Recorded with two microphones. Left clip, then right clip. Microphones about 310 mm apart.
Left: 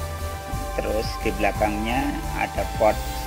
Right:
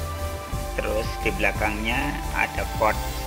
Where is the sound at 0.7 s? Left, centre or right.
Left.